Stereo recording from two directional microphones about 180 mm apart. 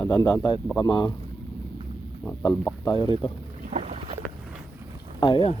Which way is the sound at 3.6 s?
40° right (ahead or behind).